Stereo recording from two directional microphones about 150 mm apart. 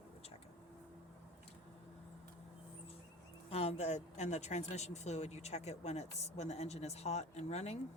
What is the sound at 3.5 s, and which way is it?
Speech, 45° left (ahead or behind).